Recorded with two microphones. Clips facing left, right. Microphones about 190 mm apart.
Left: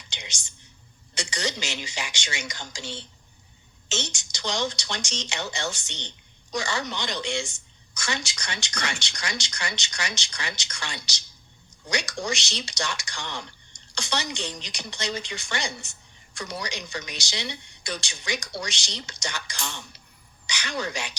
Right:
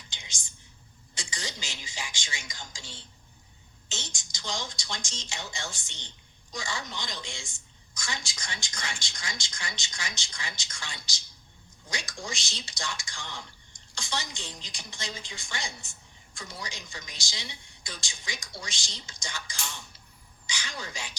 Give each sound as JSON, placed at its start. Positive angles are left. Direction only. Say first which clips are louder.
{"t": 0.1, "sound": "whispering", "louder": "left 7 dB", "side_deg": 75}
{"t": 1.1, "sound": "speech", "louder": "left 9 dB", "side_deg": 75}